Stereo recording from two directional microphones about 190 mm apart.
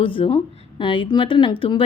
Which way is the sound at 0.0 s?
30° left (ahead or behind).